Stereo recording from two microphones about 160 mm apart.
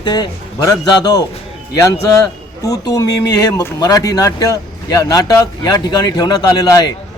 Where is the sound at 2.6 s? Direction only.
20° left (ahead or behind).